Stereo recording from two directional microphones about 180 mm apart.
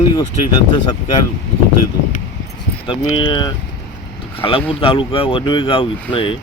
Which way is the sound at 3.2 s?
25° left (ahead or behind).